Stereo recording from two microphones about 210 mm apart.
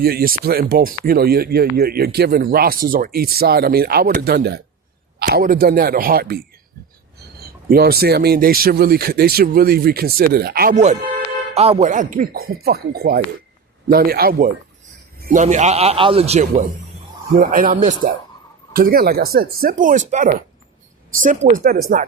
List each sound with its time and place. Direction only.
0.0 s a man's voice: 45° right (ahead or behind)